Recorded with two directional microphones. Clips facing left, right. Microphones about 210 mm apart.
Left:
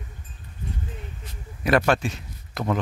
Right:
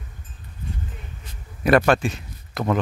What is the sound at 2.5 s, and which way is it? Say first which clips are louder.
Speech: right 3 dB; 70° right (ahead or behind).